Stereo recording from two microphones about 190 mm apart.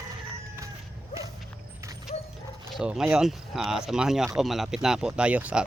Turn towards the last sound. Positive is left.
turn(degrees=-5)  # may be behind; listen again after turning